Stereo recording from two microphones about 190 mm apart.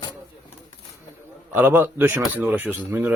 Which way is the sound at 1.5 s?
10° right (ahead or behind).